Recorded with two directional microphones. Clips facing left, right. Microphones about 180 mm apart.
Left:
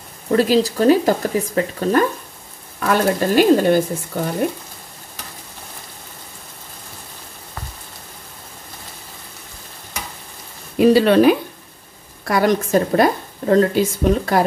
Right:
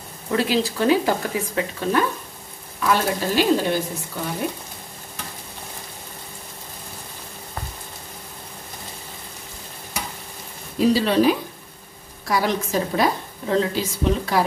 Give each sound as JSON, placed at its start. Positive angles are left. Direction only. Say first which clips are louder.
{"t": 0.4, "sound": "a woman's voice", "louder": "left 6 dB", "side_deg": 40}
{"t": 10.8, "sound": "a woman's voice", "louder": "left 6 dB", "side_deg": 60}